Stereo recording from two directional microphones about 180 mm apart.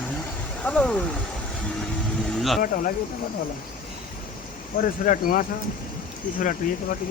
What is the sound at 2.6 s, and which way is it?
Speech, 50° left (ahead or behind).